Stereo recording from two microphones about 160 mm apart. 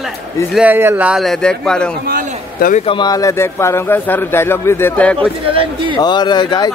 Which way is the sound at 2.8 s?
25° left (ahead or behind).